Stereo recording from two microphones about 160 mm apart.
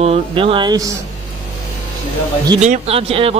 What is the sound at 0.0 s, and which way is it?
Speech, 35° right (ahead or behind).